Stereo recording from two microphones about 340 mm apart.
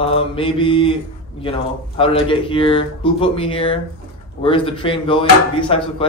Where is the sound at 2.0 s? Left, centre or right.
Centre.